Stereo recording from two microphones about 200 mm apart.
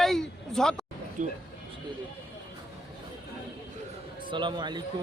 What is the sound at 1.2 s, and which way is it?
Speech, 40° right (ahead or behind).